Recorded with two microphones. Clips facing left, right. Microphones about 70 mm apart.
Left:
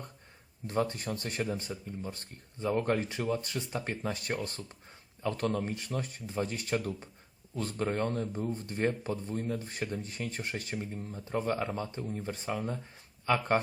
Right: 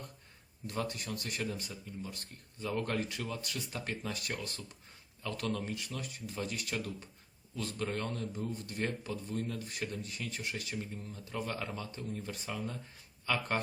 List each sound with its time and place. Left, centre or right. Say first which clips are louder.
0.7 s speech: left 6 dB; left